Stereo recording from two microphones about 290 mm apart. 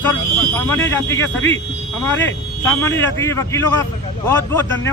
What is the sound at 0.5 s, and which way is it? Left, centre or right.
Speech, centre.